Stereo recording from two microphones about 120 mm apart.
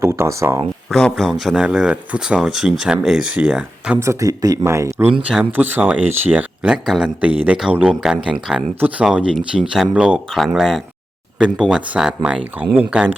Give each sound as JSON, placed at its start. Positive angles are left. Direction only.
{"t": 0.0, "sound": "speech", "side_deg": -20}
{"t": 0.9, "sound": "speech", "side_deg": 5}
{"t": 4.0, "sound": "speech", "side_deg": -25}
{"t": 4.6, "sound": "speech", "side_deg": -20}
{"t": 5.3, "sound": "speech", "side_deg": -10}